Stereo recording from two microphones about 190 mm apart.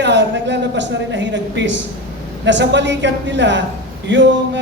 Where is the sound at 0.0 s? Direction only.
65° right (ahead or behind).